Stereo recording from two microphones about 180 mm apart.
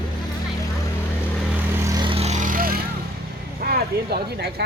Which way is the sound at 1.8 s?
20° right (ahead or behind).